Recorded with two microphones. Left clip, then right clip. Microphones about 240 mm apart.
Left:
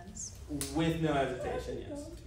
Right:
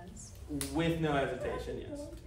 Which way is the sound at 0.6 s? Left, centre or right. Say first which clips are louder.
Even; centre.